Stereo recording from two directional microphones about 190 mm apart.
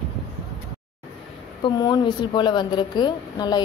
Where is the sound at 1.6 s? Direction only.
20° left (ahead or behind).